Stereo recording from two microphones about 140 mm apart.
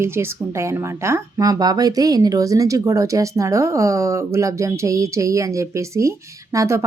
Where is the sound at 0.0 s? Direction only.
15° right (ahead or behind).